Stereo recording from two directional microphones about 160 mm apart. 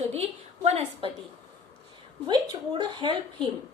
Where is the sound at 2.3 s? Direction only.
30° right (ahead or behind).